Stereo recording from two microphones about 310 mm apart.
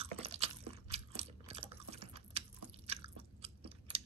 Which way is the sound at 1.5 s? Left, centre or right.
Centre.